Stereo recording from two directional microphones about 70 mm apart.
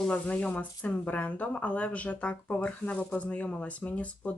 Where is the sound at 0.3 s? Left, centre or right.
Centre.